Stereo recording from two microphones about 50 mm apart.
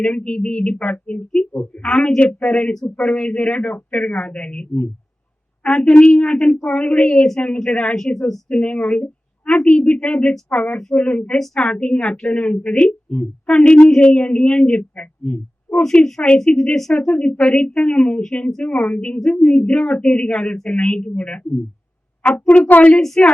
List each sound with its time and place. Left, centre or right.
0.0 s speech: left
7.9 s speech: centre
8.4 s speech: left
11.3 s speech: centre
16.4 s speech: centre
17.2 s speech: left
22.7 s speech: left
23.0 s speech: centre